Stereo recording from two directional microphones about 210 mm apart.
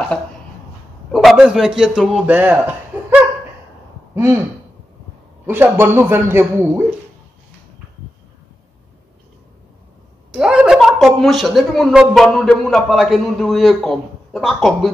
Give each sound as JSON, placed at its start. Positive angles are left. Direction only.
{"t": 1.1, "sound": "a man's voice", "side_deg": 0}
{"t": 4.1, "sound": "a sound", "side_deg": -10}
{"t": 5.5, "sound": "a man's voice", "side_deg": -10}
{"t": 10.3, "sound": "speech", "side_deg": -5}